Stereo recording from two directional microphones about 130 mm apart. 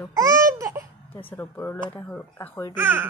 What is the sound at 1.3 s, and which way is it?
A woman's voice, 15° left (ahead or behind).